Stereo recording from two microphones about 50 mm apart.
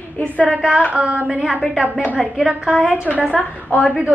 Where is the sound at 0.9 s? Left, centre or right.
Right; by 3.0 s centre.